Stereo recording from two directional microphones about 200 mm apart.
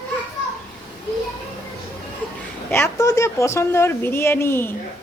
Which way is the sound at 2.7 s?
15° left (ahead or behind).